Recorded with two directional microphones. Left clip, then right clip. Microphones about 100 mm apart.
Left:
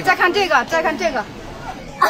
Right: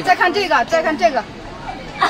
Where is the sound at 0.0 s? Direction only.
20° right (ahead or behind).